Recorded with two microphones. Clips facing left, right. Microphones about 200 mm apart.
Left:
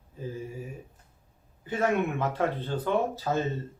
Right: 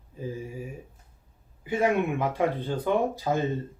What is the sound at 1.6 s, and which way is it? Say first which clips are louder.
Speech: right 2 dB; 10° right (ahead or behind).